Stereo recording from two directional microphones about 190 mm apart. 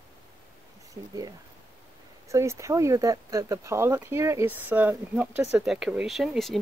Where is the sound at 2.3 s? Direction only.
15° right (ahead or behind).